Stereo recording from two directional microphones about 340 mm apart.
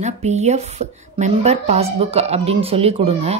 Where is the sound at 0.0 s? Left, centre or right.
Centre.